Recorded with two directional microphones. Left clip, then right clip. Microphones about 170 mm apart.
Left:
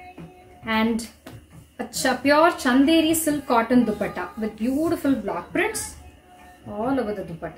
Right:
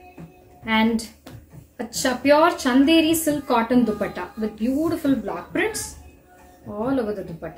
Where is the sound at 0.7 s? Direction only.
10° left (ahead or behind).